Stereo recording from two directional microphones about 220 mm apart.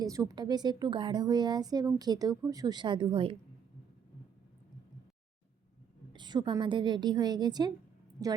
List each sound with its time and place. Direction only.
0.0 s a woman's voice: 15° right (ahead or behind)
6.1 s a woman's voice: 20° right (ahead or behind)